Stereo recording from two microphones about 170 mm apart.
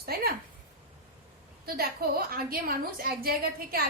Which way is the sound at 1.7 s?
65° right (ahead or behind).